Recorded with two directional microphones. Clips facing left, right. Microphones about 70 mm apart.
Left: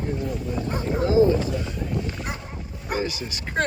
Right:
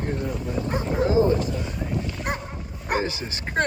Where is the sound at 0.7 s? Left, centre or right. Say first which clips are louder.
Left 2 dB; right.